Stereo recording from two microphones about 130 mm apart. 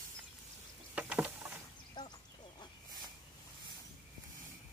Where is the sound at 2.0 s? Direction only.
35° left (ahead or behind).